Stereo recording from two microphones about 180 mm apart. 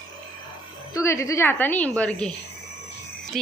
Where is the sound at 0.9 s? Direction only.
15° left (ahead or behind).